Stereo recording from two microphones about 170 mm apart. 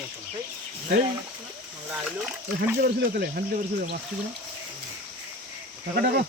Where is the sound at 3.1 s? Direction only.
60° right (ahead or behind).